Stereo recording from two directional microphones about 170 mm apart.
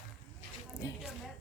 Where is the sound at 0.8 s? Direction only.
20° left (ahead or behind).